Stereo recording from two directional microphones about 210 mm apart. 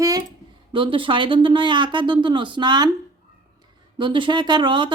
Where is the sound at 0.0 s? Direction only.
15° right (ahead or behind).